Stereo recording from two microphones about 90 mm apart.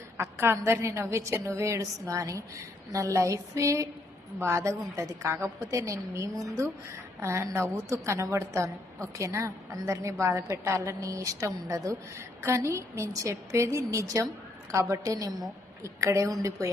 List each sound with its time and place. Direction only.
0.2 s a woman's voice: 25° right (ahead or behind)